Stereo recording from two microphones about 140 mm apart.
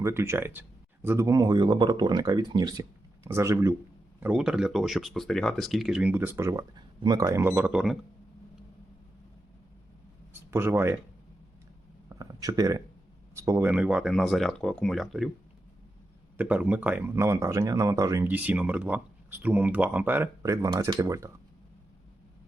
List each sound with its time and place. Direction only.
0.0 s speech: 20° right (ahead or behind)
4.2 s speech: 5° right (ahead or behind)
6.7 s speech: 30° right (ahead or behind); by 7.9 s 5° right (ahead or behind)
10.5 s speech: 15° right (ahead or behind)
12.0 s a sound: 25° right (ahead or behind)
13.3 s speech: 20° right (ahead or behind)
13.7 s speech: 5° right (ahead or behind)
16.4 s speech: 10° right (ahead or behind)